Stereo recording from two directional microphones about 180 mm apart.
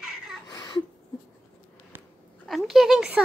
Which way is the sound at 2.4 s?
Centre (ahead or behind).